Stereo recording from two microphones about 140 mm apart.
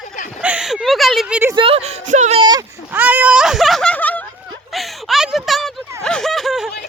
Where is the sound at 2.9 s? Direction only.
10° right (ahead or behind); by 4.2 s 10° left (ahead or behind).